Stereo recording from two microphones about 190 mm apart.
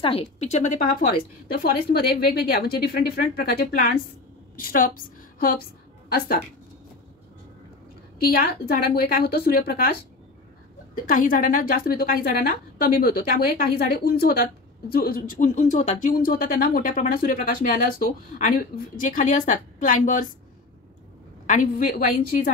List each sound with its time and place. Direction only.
0.0 s speech: 30° left (ahead or behind)
1.5 s a woman's voice: 55° left (ahead or behind)
8.3 s a woman's voice: 50° left (ahead or behind)
11.1 s a woman's voice: 45° left (ahead or behind)
21.5 s a woman's voice: 45° left (ahead or behind)